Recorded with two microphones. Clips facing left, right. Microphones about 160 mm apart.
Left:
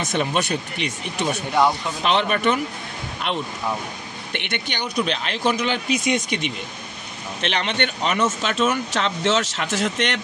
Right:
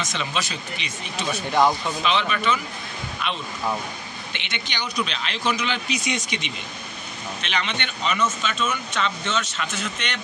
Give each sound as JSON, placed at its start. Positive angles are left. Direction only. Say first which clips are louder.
{"t": 0.0, "sound": "speech", "louder": "left 6 dB", "side_deg": 55}